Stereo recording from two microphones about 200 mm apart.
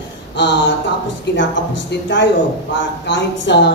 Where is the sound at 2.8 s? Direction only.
60° left (ahead or behind).